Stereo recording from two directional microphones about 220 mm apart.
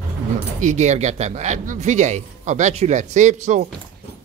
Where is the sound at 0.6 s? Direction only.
30° right (ahead or behind).